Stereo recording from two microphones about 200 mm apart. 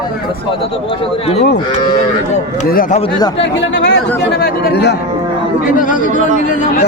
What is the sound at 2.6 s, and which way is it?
Speech, 45° left (ahead or behind).